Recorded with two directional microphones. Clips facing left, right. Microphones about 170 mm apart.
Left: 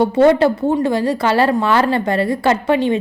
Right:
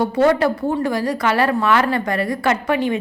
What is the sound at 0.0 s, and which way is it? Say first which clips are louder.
A woman's voice: left 4 dB; 25° left (ahead or behind).